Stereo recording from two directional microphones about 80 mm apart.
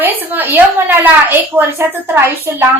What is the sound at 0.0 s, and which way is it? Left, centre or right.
A woman's voice, right.